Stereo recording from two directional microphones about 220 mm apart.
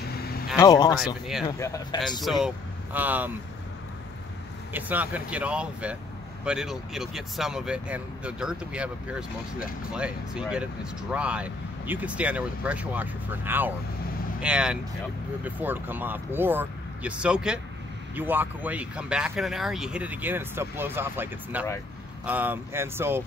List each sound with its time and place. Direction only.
0.6 s speech: 15° left (ahead or behind)
0.9 s speech: centre (ahead or behind)
1.6 s speech: 15° left (ahead or behind)
2.2 s speech: centre (ahead or behind)
4.7 s speech: 10° right (ahead or behind)